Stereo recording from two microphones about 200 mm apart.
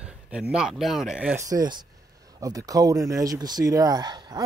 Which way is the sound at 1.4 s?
20° right (ahead or behind).